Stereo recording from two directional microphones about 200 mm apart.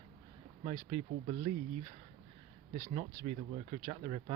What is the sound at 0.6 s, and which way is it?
Speech, 35° right (ahead or behind).